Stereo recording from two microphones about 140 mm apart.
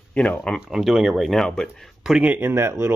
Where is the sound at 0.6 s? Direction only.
Centre (ahead or behind).